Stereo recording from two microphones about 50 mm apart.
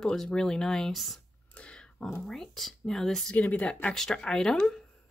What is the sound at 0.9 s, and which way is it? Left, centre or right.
Speech, centre.